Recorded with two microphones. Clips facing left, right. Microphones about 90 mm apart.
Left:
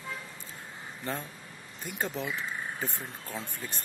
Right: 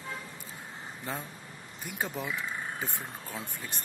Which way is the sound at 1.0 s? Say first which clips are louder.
Left 3 dB; 10° right (ahead or behind).